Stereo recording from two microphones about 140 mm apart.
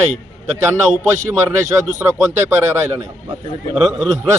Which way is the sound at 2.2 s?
15° right (ahead or behind).